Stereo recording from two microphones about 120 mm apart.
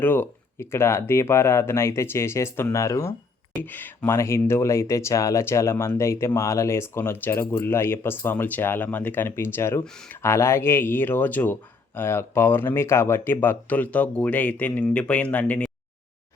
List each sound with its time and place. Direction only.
0.0 s speech: 15° left (ahead or behind)
3.6 s speech: 15° left (ahead or behind)